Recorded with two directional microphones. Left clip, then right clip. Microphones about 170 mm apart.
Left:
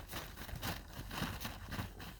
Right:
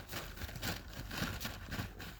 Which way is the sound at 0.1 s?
35° left (ahead or behind).